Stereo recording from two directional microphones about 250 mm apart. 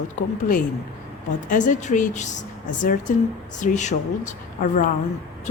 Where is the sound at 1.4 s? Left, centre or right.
Left.